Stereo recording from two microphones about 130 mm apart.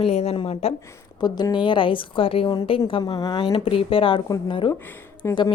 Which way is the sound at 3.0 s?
30° left (ahead or behind).